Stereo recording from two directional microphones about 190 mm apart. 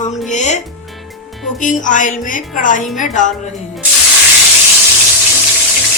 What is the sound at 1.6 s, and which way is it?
A woman's voice, 40° left (ahead or behind).